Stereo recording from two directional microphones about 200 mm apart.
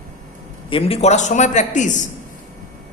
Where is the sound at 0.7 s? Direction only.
30° left (ahead or behind).